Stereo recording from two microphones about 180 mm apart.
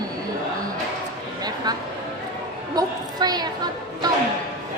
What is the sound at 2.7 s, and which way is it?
Speech, 20° right (ahead or behind).